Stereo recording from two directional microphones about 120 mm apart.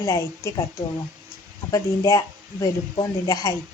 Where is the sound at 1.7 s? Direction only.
30° left (ahead or behind).